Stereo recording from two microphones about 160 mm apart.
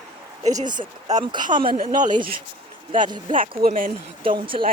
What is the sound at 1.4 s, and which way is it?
Speech, 55° right (ahead or behind).